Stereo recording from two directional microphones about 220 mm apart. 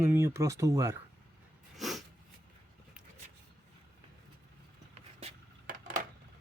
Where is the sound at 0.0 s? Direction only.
10° right (ahead or behind).